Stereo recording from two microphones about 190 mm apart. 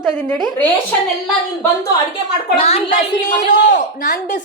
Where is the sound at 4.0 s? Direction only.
50° left (ahead or behind).